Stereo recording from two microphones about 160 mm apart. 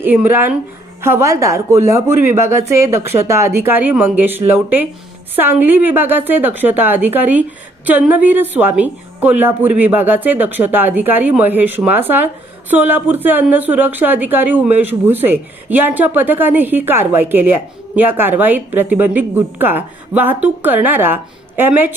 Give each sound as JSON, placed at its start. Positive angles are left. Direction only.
{"t": 0.0, "sound": "a woman's voice", "side_deg": -10}